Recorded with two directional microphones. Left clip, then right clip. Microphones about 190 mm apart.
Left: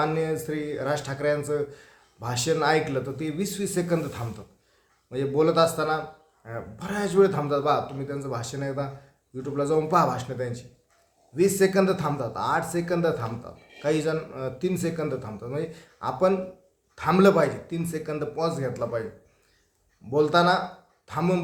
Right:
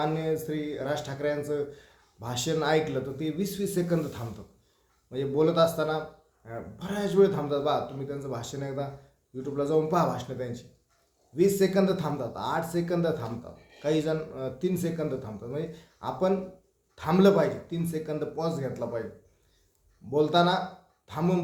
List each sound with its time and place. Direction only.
0.0 s a man's voice: 15° left (ahead or behind)
20.1 s a man's voice: 15° left (ahead or behind)